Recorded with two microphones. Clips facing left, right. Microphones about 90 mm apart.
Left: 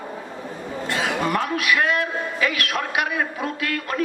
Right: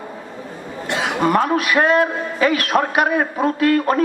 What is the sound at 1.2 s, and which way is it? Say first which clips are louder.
A man's voice: right 6 dB; 40° right (ahead or behind).